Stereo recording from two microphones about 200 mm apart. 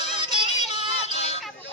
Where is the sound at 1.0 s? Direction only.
30° left (ahead or behind).